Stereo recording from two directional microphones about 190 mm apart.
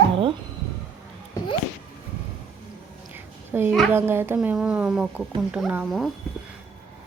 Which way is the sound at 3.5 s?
10° right (ahead or behind).